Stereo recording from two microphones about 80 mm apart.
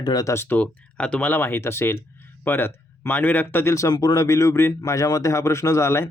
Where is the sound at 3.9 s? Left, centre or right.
Left.